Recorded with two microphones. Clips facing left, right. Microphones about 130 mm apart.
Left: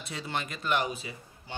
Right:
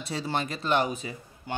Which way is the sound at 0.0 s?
35° right (ahead or behind).